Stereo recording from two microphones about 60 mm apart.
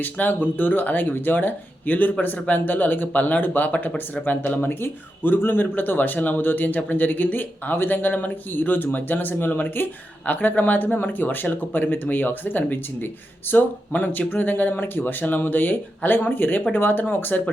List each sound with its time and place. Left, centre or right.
0.0 s speech: left